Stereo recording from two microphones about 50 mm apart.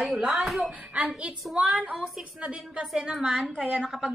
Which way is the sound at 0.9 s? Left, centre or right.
Right.